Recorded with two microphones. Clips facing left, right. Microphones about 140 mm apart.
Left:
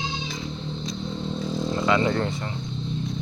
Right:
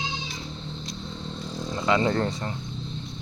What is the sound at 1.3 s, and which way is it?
Vehicle, 35° left (ahead or behind).